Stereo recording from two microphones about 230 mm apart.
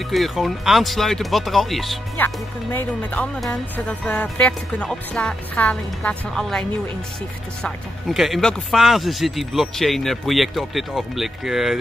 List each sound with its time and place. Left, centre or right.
0.1 s speech: centre
7.6 s speech: centre